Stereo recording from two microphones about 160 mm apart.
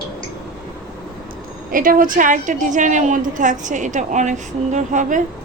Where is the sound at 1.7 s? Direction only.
60° right (ahead or behind).